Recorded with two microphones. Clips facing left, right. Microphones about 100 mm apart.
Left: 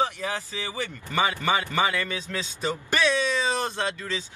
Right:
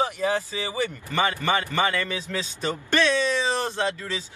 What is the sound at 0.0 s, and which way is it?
Speech, 15° right (ahead or behind).